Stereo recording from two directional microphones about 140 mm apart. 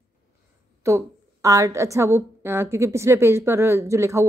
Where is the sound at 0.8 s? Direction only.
20° right (ahead or behind).